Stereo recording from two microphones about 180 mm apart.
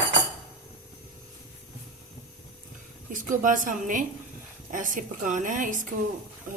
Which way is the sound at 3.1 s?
45° right (ahead or behind).